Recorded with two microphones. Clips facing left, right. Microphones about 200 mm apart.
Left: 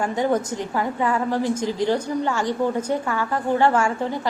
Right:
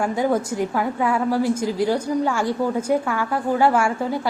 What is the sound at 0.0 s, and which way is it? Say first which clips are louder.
A woman's voice: right 1 dB; 10° right (ahead or behind).